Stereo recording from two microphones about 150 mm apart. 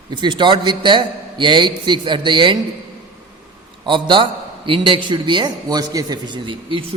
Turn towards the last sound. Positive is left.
turn(degrees=-35)  # may be behind; listen again after turning